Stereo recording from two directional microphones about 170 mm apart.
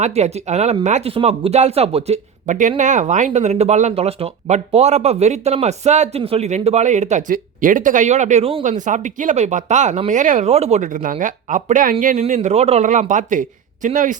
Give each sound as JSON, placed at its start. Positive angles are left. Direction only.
{"t": 0.0, "sound": "speech", "side_deg": -40}
{"t": 8.6, "sound": "speech", "side_deg": -45}